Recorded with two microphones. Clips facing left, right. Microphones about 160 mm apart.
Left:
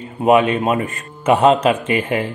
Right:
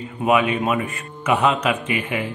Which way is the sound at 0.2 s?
35° left (ahead or behind).